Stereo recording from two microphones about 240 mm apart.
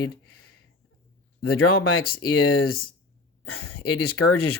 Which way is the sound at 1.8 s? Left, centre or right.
Left.